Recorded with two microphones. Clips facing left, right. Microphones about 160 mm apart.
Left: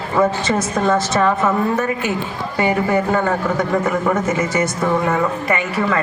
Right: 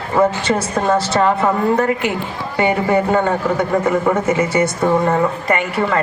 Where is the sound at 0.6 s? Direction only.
30° right (ahead or behind).